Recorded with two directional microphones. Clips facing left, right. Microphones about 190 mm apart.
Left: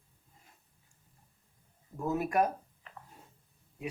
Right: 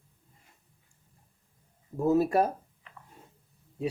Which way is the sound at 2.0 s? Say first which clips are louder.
Right 6 dB; 30° right (ahead or behind).